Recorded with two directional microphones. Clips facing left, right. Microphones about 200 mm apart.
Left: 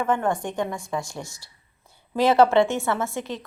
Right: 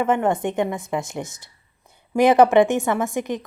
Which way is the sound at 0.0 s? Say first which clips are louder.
Right 4 dB; 20° right (ahead or behind).